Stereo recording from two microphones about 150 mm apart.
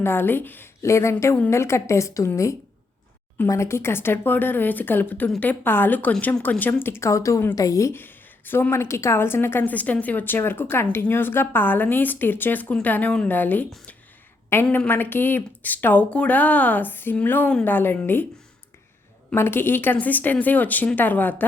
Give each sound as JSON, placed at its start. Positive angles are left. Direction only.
{"t": 0.0, "sound": "a woman's voice", "side_deg": 15}
{"t": 19.3, "sound": "a woman's voice", "side_deg": 15}